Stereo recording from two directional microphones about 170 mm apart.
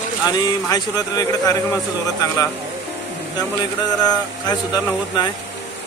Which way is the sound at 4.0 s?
25° left (ahead or behind).